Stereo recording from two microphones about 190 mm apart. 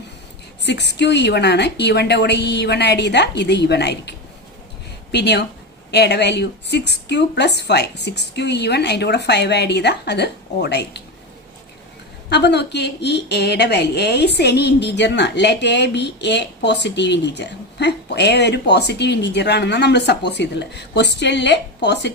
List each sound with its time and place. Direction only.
0.6 s a woman's voice: 65° left (ahead or behind)
5.1 s a woman's voice: 60° left (ahead or behind)
12.3 s a woman's voice: 60° left (ahead or behind)